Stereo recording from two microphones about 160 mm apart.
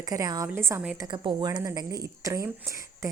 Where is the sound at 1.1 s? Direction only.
30° right (ahead or behind).